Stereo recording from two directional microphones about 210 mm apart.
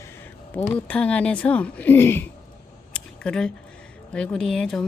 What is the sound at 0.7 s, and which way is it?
Speech, 5° left (ahead or behind).